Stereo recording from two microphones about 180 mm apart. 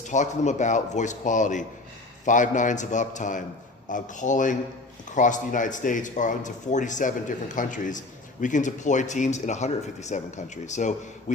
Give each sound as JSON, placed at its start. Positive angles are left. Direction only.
{"t": 0.1, "sound": "a man's voice", "side_deg": 40}